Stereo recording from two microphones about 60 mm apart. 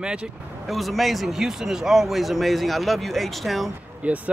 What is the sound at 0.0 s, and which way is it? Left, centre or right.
Speech, centre.